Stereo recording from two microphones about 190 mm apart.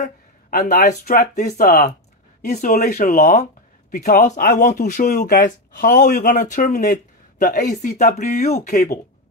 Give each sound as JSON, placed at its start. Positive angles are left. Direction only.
{"t": 0.0, "sound": "speech", "side_deg": 50}
{"t": 1.2, "sound": "speech", "side_deg": 40}
{"t": 2.4, "sound": "speech", "side_deg": 40}
{"t": 8.6, "sound": "speech", "side_deg": 50}